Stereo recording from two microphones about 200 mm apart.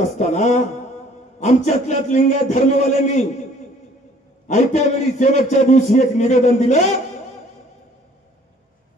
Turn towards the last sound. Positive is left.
turn(degrees=35)  # may be behind; listen again after turning